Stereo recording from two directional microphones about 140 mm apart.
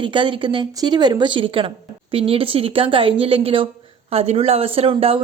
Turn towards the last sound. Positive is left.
turn(degrees=-40)  # may be behind; listen again after turning